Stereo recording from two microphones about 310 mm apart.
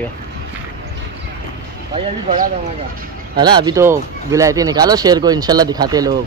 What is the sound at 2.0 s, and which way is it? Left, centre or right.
Speech, right.